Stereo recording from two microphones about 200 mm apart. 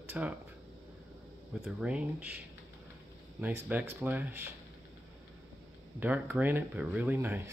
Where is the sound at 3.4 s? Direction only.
10° right (ahead or behind).